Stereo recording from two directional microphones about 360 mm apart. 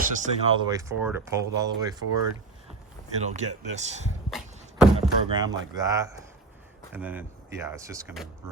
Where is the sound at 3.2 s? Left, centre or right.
Centre.